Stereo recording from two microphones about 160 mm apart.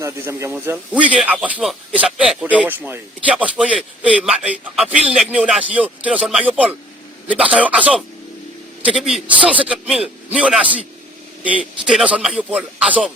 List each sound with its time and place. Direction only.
0.0 s a man's voice: 20° right (ahead or behind)